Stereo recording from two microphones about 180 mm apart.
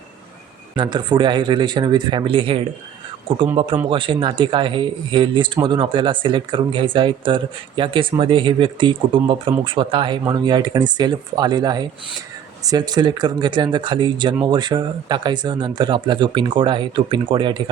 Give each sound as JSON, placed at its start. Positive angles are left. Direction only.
{"t": 0.8, "sound": "speech", "side_deg": -25}